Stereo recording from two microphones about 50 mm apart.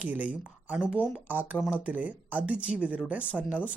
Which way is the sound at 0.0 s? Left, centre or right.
Right.